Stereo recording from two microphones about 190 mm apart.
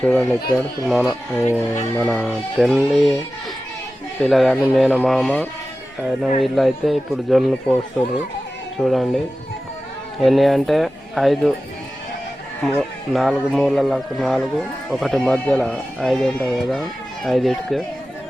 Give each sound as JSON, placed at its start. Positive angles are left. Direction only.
{"t": 0.0, "sound": "speech", "side_deg": 5}
{"t": 1.4, "sound": "speech", "side_deg": 10}
{"t": 4.2, "sound": "speech", "side_deg": 0}
{"t": 8.8, "sound": "speech", "side_deg": 0}
{"t": 13.1, "sound": "speech", "side_deg": 0}